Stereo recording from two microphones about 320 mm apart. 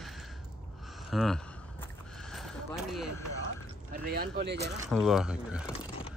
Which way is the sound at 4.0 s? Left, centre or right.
Right.